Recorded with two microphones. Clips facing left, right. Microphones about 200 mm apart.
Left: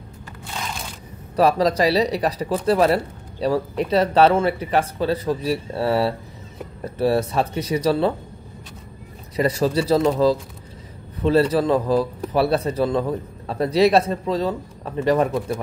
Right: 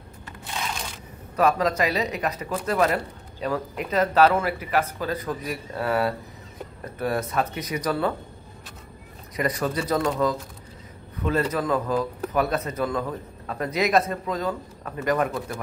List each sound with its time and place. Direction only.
1.3 s speech: 35° left (ahead or behind)
9.4 s speech: 30° left (ahead or behind)